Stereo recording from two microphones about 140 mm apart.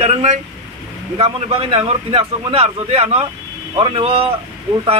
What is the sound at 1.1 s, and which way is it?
A man's voice, 40° right (ahead or behind).